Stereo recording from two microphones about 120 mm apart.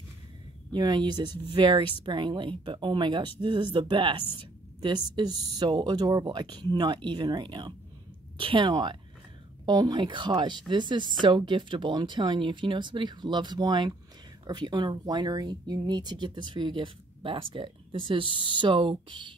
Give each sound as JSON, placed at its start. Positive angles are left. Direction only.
{"t": 0.7, "sound": "speech", "side_deg": -40}